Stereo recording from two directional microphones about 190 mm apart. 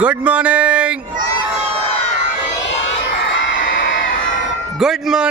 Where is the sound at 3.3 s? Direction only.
80° left.